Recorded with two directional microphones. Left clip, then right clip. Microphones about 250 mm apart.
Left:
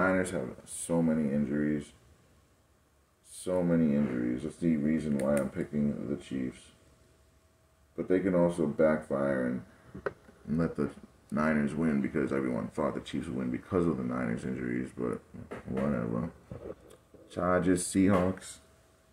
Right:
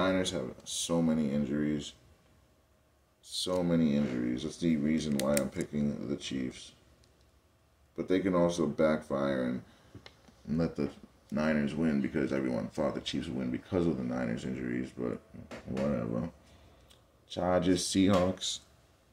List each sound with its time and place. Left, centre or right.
0.0 s a sound: centre
0.8 s speech: centre
3.3 s speech: centre
7.9 s speech: centre
10.5 s speech: centre
17.3 s speech: centre